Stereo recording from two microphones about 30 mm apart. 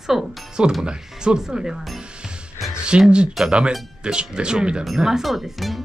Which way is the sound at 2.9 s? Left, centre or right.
Right.